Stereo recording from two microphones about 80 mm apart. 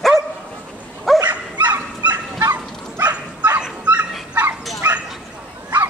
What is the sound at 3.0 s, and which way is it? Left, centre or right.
Bow-wow, centre.